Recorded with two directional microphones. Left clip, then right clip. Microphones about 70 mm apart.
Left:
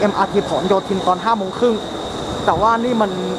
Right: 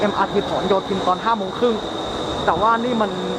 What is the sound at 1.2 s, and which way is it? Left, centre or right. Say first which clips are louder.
Speech: left 2 dB; centre.